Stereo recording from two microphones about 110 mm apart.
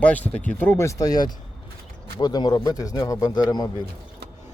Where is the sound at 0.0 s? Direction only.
15° left (ahead or behind); by 3.7 s 40° left (ahead or behind).